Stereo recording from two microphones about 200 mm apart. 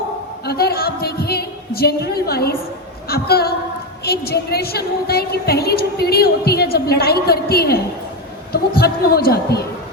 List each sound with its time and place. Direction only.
0.4 s a woman's voice: 50° left (ahead or behind)